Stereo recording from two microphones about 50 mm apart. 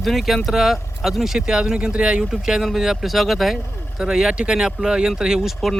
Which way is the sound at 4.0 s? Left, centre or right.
Centre.